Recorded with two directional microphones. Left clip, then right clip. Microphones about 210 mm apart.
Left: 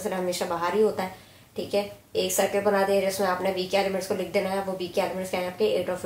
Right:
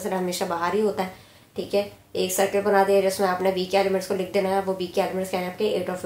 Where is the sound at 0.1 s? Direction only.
35° right (ahead or behind).